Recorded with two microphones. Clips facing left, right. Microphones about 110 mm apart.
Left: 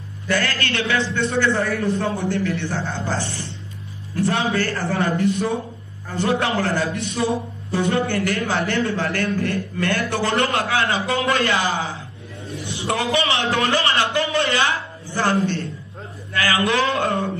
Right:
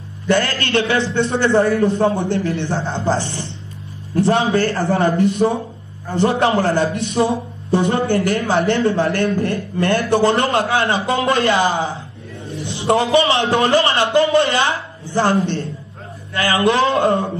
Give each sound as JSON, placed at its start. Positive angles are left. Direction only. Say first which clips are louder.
{"t": 0.3, "sound": "a man's voice", "louder": "right 6 dB", "side_deg": -30}